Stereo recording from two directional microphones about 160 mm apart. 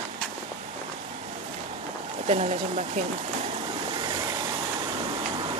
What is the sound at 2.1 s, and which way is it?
Speech, 45° right (ahead or behind).